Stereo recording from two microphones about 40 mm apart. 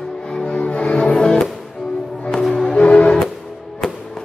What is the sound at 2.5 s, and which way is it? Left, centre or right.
Music, centre.